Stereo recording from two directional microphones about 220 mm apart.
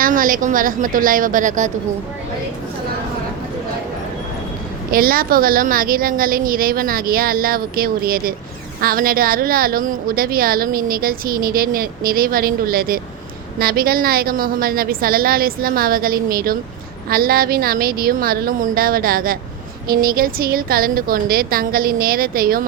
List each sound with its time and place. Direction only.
0.0 s a woman's voice: 40° right (ahead or behind)
4.9 s a woman's voice: 40° right (ahead or behind)